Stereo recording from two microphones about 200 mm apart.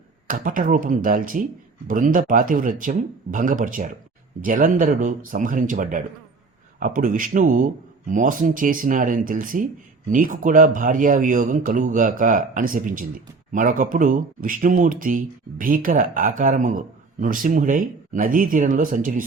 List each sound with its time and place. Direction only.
0.3 s speech: 45° right (ahead or behind)